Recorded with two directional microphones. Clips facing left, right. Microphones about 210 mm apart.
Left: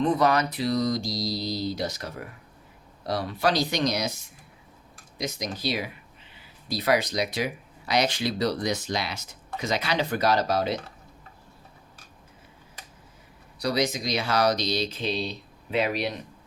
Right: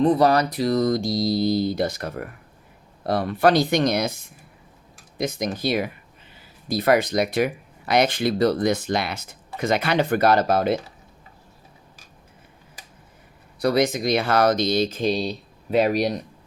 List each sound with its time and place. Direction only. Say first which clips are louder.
0.0 s speech: right 5 dB; 35° right (ahead or behind); by 10.8 s 55° right (ahead or behind)
13.6 s speech: right 6 dB; 55° right (ahead or behind)